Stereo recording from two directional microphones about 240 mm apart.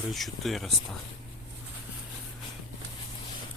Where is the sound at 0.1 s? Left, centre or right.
Centre.